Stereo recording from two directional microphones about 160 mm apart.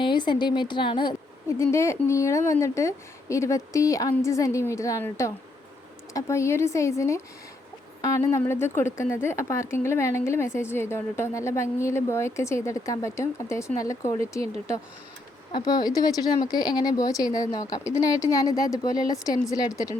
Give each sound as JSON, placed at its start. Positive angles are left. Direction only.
{"t": 0.0, "sound": "a woman's voice", "side_deg": 30}
{"t": 1.5, "sound": "a woman's voice", "side_deg": 15}
{"t": 15.5, "sound": "a woman's voice", "side_deg": 25}